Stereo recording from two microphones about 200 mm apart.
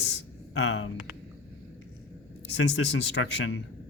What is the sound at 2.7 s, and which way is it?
Speech, 60° left (ahead or behind).